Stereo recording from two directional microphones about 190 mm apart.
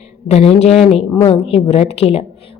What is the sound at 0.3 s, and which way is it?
A woman's voice, 35° left (ahead or behind).